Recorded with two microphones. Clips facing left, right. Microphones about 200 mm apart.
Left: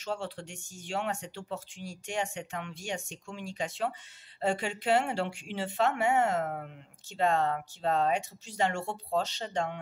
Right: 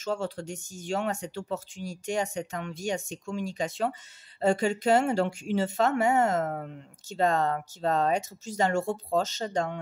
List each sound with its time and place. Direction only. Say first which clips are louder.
0.0 s speech: right 5 dB; 45° right (ahead or behind)